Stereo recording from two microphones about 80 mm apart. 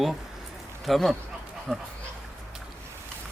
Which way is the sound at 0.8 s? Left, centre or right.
Centre.